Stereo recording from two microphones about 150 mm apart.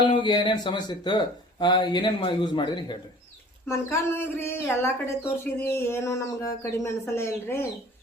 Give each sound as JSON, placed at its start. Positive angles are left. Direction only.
{"t": 0.1, "sound": "speech", "side_deg": 30}
{"t": 3.7, "sound": "speech", "side_deg": 15}